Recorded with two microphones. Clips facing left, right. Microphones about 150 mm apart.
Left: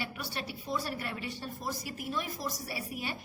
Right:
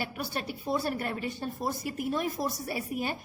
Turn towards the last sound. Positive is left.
turn(degrees=-45)  # may be behind; listen again after turning